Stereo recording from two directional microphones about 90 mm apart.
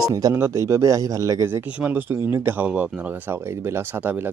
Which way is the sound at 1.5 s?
25° right (ahead or behind).